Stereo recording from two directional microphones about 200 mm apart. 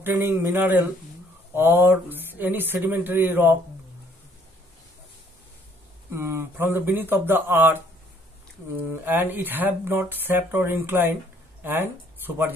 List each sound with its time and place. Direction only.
0.0 s speech: 10° right (ahead or behind)
6.1 s speech: 10° right (ahead or behind)
9.0 s speech: 10° right (ahead or behind)